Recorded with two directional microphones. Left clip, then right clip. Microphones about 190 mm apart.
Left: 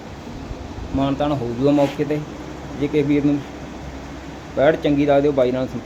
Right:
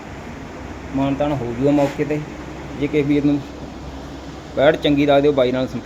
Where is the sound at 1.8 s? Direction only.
Centre (ahead or behind).